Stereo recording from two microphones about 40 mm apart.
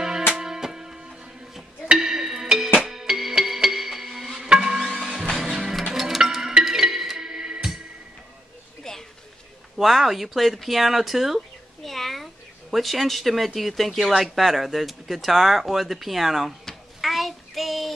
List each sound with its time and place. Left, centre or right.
0.3 s music: centre
8.8 s a sound: centre
9.8 s speech: centre
11.8 s a sound: centre
12.7 s speech: centre
17.0 s child singing: centre